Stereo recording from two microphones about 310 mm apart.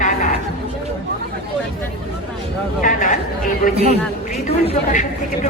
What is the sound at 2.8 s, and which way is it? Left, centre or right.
Speech, left.